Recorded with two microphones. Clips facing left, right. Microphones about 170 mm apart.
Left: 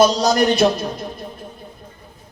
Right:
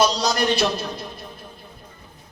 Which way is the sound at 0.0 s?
45° left (ahead or behind).